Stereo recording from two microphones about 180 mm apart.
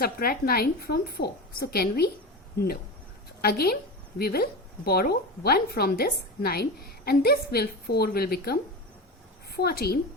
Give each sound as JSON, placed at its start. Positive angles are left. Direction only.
{"t": 0.0, "sound": "a woman's voice", "side_deg": 55}
{"t": 3.4, "sound": "a woman's voice", "side_deg": 60}
{"t": 9.6, "sound": "a woman's voice", "side_deg": 60}